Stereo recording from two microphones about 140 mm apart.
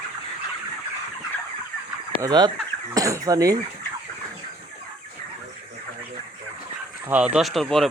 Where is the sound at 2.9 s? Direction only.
25° right (ahead or behind).